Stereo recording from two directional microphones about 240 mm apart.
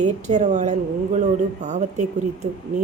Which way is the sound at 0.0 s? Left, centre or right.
Right.